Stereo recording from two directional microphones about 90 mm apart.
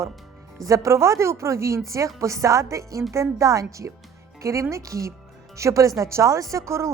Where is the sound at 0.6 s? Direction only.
40° right (ahead or behind).